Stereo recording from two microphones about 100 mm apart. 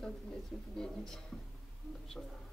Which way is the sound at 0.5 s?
Centre (ahead or behind).